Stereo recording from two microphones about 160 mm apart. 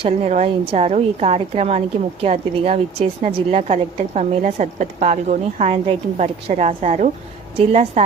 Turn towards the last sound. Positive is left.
turn(degrees=-40)  # may be behind; listen again after turning